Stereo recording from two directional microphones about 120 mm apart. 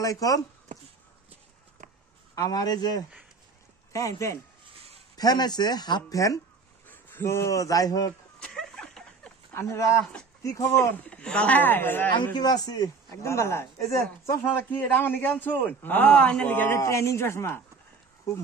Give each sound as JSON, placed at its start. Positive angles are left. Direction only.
{"t": 0.0, "sound": "a man's voice", "side_deg": 30}
{"t": 2.3, "sound": "a man's voice", "side_deg": 30}
{"t": 8.4, "sound": "a sound", "side_deg": 5}
{"t": 9.5, "sound": "a man's voice", "side_deg": 25}
{"t": 11.1, "sound": "a woman's voice", "side_deg": 10}
{"t": 12.1, "sound": "a man's voice", "side_deg": 40}